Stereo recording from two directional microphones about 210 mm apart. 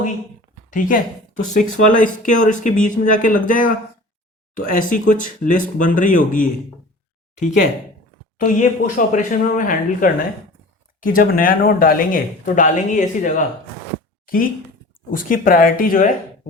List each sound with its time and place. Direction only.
0.7 s speech: 40° left (ahead or behind)